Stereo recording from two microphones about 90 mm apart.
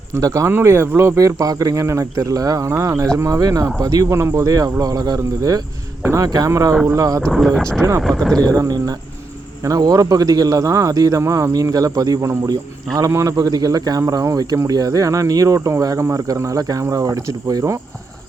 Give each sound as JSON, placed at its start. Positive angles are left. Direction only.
{"t": 0.1, "sound": "speech", "side_deg": -40}
{"t": 6.0, "sound": "speech", "side_deg": -30}
{"t": 6.2, "sound": "speech", "side_deg": -45}
{"t": 7.3, "sound": "speech", "side_deg": 5}
{"t": 7.8, "sound": "speech", "side_deg": -35}
{"t": 8.0, "sound": "speech", "side_deg": 5}
{"t": 8.4, "sound": "speech", "side_deg": -45}